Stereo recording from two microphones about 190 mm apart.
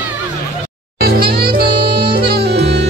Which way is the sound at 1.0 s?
55° right (ahead or behind).